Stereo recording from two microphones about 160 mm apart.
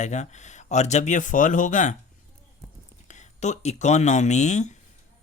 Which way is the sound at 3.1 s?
45° left (ahead or behind).